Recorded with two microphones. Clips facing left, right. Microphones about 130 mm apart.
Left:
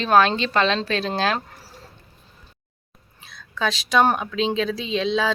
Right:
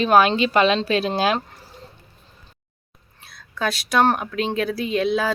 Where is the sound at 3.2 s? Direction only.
Centre (ahead or behind).